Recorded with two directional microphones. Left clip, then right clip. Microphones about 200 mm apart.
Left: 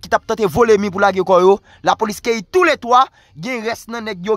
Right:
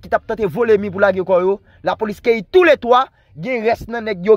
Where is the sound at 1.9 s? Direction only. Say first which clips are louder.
Left 1 dB; 10° left (ahead or behind).